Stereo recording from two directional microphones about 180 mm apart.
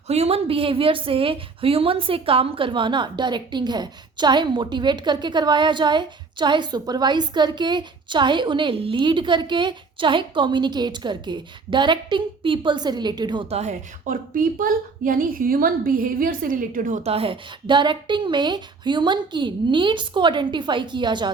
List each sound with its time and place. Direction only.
0.1 s a woman's voice: 35° right (ahead or behind)